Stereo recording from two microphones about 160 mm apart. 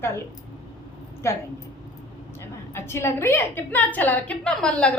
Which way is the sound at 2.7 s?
15° left (ahead or behind).